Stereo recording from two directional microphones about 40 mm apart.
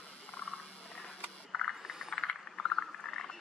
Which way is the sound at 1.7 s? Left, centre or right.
Centre.